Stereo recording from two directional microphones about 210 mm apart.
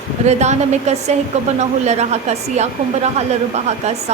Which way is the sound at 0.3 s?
35° right (ahead or behind).